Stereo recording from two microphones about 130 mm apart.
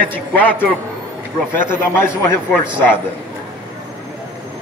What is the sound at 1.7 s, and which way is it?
Speech, 20° left (ahead or behind).